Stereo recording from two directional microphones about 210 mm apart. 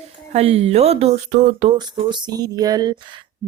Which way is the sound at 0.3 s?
30° right (ahead or behind).